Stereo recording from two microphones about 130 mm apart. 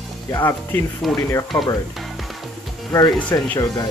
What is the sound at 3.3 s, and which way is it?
Speech, 20° left (ahead or behind).